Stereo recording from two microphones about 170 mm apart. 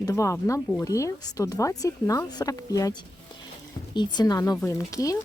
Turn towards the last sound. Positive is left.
turn(degrees=20)  # may be behind; listen again after turning